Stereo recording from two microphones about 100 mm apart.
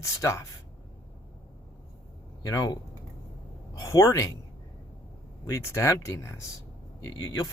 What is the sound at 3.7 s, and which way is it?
Speech, 35° left (ahead or behind).